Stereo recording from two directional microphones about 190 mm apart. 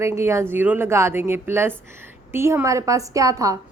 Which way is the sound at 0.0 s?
15° right (ahead or behind).